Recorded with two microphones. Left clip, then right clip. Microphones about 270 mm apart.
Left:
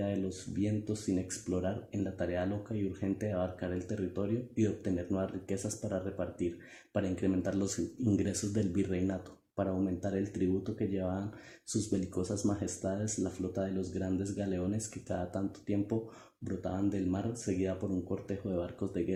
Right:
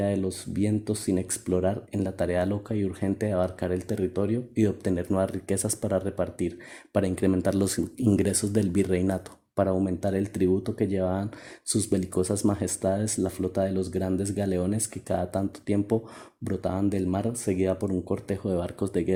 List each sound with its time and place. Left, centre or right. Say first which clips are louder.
0.0 s speech: right 8 dB; right